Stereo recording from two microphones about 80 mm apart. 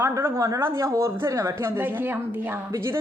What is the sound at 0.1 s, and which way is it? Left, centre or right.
Speech, right.